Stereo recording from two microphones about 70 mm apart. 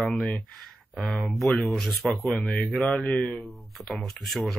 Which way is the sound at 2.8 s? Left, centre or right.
Centre.